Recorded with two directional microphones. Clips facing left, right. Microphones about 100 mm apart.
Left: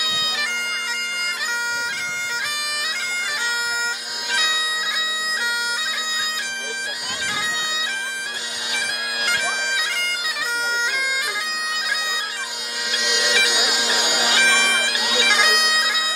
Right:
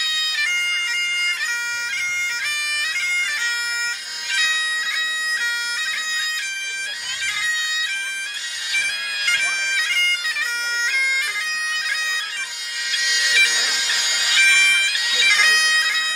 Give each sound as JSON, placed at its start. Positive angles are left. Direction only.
{"t": 0.0, "sound": "bagpipes", "side_deg": 15}
{"t": 2.7, "sound": "bagpipes", "side_deg": 15}
{"t": 4.3, "sound": "bagpipes", "side_deg": 20}
{"t": 8.7, "sound": "bagpipes", "side_deg": 15}
{"t": 12.9, "sound": "bagpipes", "side_deg": 20}